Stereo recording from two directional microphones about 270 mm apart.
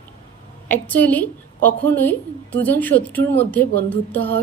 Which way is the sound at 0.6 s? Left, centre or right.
Centre.